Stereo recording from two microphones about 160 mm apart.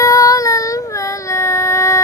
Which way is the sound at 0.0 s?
20° left (ahead or behind).